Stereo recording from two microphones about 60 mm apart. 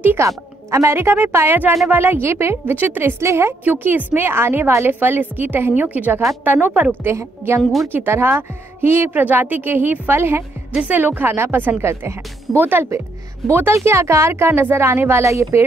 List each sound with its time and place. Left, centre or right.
0.2 s speech: right
2.6 s a woman's voice: right
3.2 s speech: right
3.6 s a woman's voice: right
9.1 s a woman's voice: right